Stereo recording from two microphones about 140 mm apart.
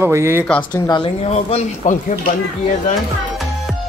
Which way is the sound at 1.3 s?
55° left (ahead or behind).